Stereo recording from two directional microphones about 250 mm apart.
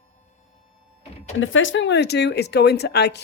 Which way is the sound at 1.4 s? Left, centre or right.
Left.